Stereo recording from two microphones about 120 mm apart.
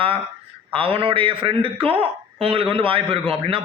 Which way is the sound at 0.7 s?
50° right (ahead or behind).